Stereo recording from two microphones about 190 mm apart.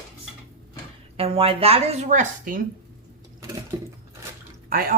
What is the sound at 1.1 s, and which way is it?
A woman's voice, 30° right (ahead or behind).